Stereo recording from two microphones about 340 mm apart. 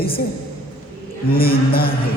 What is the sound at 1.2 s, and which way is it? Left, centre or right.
Speech, left.